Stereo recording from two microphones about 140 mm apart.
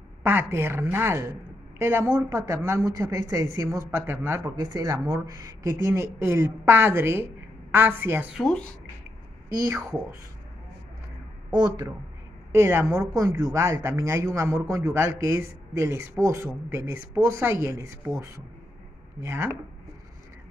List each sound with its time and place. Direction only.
0.2 s a woman's voice: 15° right (ahead or behind)
8.4 s speech: 5° left (ahead or behind)
9.7 s speech: 20° right (ahead or behind)
12.5 s a woman's voice: 20° right (ahead or behind)